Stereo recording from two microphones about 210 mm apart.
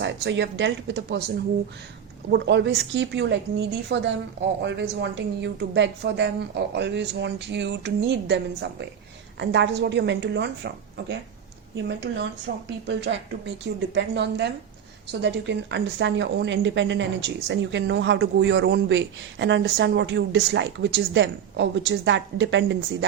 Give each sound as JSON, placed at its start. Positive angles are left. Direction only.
{"t": 0.0, "sound": "a woman's voice", "side_deg": -60}
{"t": 2.3, "sound": "a woman's voice", "side_deg": -55}
{"t": 9.4, "sound": "a woman's voice", "side_deg": -60}